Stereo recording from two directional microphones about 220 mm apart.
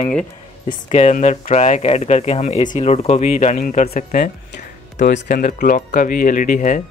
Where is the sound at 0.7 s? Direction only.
30° left (ahead or behind).